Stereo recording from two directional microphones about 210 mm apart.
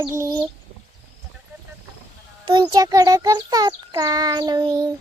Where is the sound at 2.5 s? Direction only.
20° right (ahead or behind).